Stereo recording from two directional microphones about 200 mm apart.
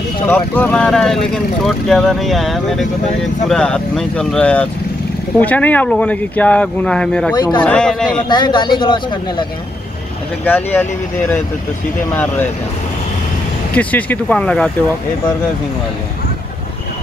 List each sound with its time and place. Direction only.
0.3 s speech: 5° left (ahead or behind)
7.3 s speech: 20° left (ahead or behind)
7.6 s speech: 5° left (ahead or behind)
8.3 s speech: 20° left (ahead or behind)
10.4 s speech: 10° left (ahead or behind)
13.7 s speech: 10° left (ahead or behind)